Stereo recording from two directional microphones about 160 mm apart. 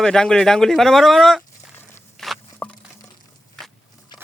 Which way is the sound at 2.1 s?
Centre (ahead or behind).